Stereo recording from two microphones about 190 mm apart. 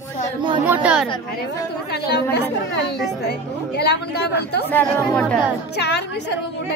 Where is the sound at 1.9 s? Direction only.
60° left (ahead or behind).